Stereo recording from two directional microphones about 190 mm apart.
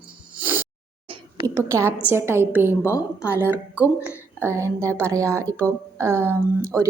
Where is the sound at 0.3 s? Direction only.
10° right (ahead or behind).